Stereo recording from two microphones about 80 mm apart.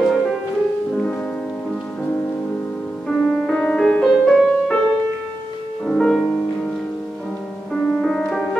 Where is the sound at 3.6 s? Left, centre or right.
Centre.